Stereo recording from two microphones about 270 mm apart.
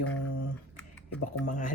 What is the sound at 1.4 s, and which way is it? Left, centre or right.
Speech, left.